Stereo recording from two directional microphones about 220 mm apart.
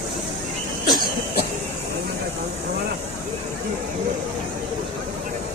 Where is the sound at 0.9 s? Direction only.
45° left (ahead or behind).